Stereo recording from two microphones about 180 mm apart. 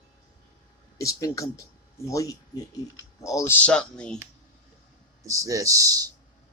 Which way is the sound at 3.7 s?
5° left (ahead or behind).